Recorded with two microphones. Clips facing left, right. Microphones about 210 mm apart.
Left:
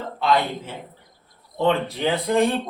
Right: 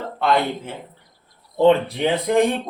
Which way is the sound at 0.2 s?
55° right (ahead or behind).